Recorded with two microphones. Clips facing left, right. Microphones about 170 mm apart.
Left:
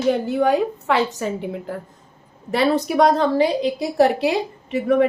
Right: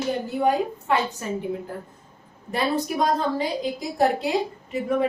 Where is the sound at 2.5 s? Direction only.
80° left.